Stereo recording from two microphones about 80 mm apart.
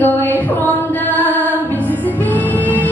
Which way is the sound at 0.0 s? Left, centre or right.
Left.